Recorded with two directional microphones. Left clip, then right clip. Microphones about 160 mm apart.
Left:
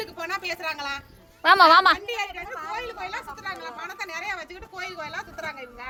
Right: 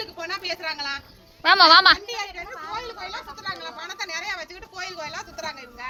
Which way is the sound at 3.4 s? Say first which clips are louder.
Right 1 dB; 15° left (ahead or behind).